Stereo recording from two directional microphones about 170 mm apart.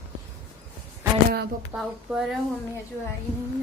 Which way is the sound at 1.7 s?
5° right (ahead or behind).